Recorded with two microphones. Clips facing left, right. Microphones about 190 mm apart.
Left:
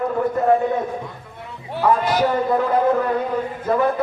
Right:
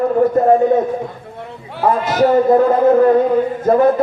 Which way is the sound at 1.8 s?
45° right (ahead or behind).